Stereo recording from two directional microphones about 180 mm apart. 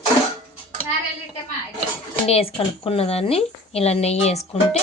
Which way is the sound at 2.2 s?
35° left (ahead or behind).